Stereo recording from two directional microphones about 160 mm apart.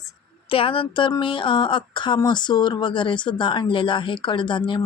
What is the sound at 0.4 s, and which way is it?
Speech, 35° left (ahead or behind).